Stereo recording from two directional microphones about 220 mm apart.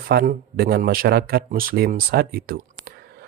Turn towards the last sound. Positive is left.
turn(degrees=-45)  # may be behind; listen again after turning